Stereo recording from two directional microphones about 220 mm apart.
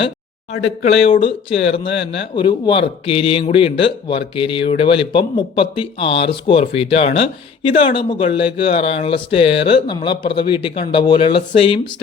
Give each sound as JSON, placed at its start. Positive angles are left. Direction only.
{"t": 0.5, "sound": "speech", "side_deg": 25}